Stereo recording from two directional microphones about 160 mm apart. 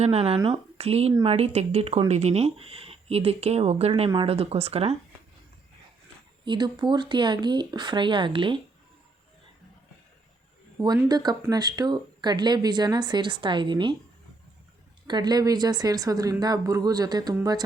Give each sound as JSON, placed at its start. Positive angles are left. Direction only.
{"t": 0.0, "sound": "speech", "side_deg": -40}
{"t": 6.4, "sound": "speech", "side_deg": -30}
{"t": 11.1, "sound": "speech", "side_deg": -25}
{"t": 15.0, "sound": "speech", "side_deg": -25}